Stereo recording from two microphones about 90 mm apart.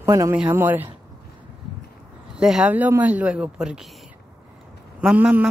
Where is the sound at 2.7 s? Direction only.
20° right (ahead or behind).